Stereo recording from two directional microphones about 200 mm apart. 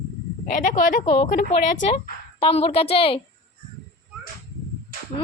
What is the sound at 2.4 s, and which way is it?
Speech, 30° left (ahead or behind).